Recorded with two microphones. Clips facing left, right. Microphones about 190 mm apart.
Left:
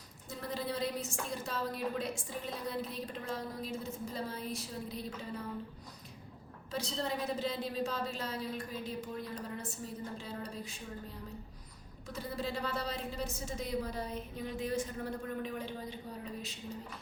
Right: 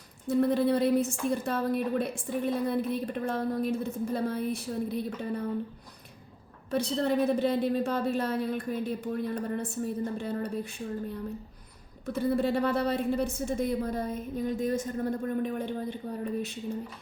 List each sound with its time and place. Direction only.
0.3 s a woman's voice: 60° right (ahead or behind)
6.7 s a woman's voice: 60° right (ahead or behind)